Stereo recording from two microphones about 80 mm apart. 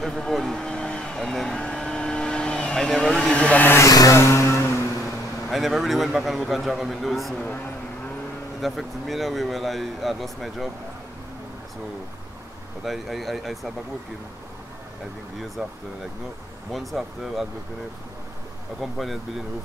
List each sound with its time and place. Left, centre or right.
0.0 s vehicle: centre
3.3 s speech: centre
3.9 s music: left
5.5 s speech: centre
8.5 s speech: centre
12.8 s speech: centre
16.7 s speech: centre
18.8 s speech: centre